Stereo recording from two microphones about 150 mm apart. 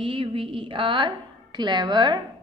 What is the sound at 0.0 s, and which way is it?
A woman's voice, 35° right (ahead or behind).